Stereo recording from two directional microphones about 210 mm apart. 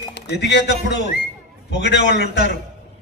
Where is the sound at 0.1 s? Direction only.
55° left (ahead or behind).